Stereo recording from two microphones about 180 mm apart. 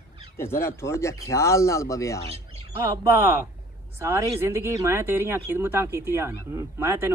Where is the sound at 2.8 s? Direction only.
15° right (ahead or behind).